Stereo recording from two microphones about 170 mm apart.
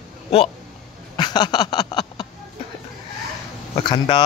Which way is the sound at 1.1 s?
25° left (ahead or behind).